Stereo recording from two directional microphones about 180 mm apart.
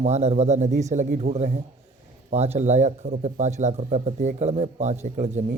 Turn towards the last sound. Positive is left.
turn(degrees=-40)  # may be behind; listen again after turning